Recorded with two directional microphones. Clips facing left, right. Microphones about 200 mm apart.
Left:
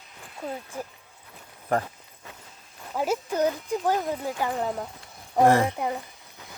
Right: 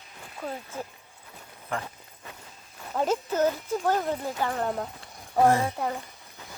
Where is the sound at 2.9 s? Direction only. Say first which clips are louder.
Even; 10° left (ahead or behind).